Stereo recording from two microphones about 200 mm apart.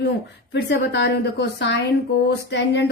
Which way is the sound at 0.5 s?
60° left (ahead or behind).